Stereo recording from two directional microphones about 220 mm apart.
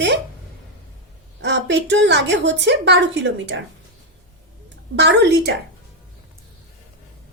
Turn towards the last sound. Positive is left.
turn(degrees=-50)  # may be behind; listen again after turning